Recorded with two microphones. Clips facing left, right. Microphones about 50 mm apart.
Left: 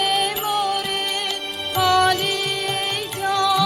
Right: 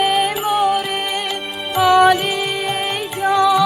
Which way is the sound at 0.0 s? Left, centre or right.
Centre.